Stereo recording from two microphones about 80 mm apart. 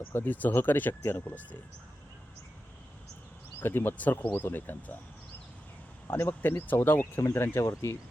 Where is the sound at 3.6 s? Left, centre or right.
Left.